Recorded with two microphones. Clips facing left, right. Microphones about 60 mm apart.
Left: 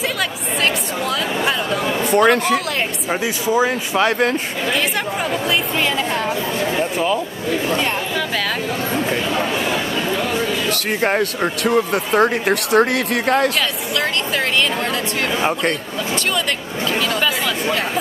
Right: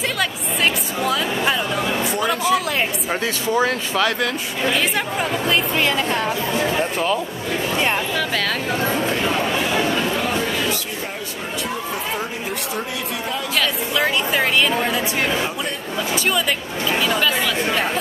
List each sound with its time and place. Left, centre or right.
1.0 s a sound: centre
2.0 s speech: left
3.1 s speech: centre
4.0 s speech: left
5.5 s a woman's voice: centre
10.7 s speech: left
13.9 s a woman's voice: centre